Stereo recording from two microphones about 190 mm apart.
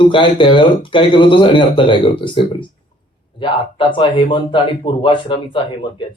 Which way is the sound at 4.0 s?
25° left (ahead or behind).